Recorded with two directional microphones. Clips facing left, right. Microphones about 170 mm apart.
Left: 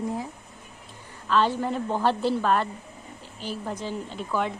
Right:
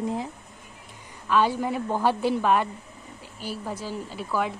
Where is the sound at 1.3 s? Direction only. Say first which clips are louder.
Right 1 dB; 10° right (ahead or behind).